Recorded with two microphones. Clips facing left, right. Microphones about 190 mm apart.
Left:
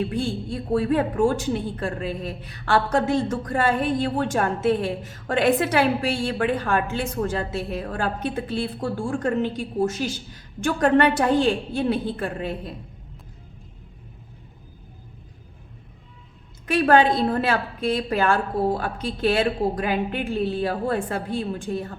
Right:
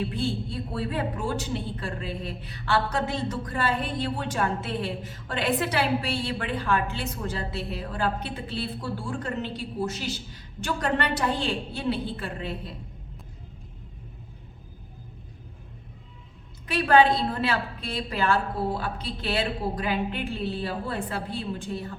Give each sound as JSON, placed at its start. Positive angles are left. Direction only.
{"t": 0.0, "sound": "a woman's voice", "side_deg": 45}
{"t": 16.6, "sound": "a woman's voice", "side_deg": 50}